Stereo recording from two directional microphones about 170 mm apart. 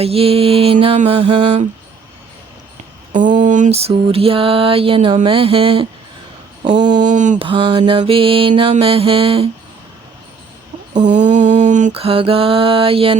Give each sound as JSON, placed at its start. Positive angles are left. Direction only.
{"t": 0.0, "sound": "mantra", "side_deg": -35}
{"t": 3.1, "sound": "mantra", "side_deg": -50}
{"t": 6.7, "sound": "a sound", "side_deg": -25}
{"t": 7.0, "sound": "a sound", "side_deg": -45}
{"t": 7.3, "sound": "mantra", "side_deg": -30}
{"t": 10.9, "sound": "mantra", "side_deg": -45}
{"t": 11.9, "sound": "mantra", "side_deg": -35}